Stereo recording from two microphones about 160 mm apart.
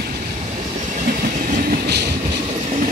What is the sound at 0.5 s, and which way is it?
Train, 50° right (ahead or behind).